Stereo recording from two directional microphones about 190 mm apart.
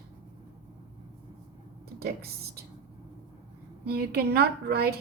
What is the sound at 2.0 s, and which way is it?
Speech, 55° right (ahead or behind).